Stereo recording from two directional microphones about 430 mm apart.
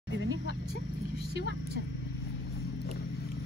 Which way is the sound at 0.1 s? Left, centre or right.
Left.